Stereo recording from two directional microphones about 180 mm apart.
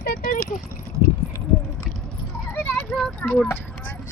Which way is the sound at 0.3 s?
45° left (ahead or behind).